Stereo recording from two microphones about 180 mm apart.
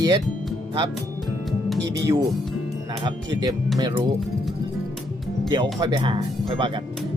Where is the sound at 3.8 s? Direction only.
25° right (ahead or behind).